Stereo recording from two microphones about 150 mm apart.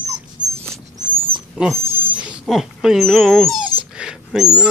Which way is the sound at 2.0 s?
10° right (ahead or behind).